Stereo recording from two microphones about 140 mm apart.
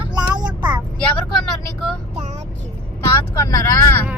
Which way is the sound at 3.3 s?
20° left (ahead or behind).